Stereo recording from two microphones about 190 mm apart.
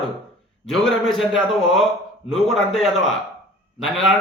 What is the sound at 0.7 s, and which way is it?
A man's voice, centre (ahead or behind).